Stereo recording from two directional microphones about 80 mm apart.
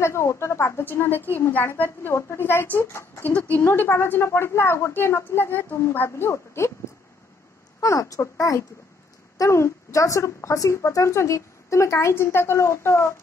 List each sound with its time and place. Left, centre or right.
0.0 s a woman's voice: left
3.3 s a woman's voice: centre; by 6.7 s left
7.8 s a woman's voice: left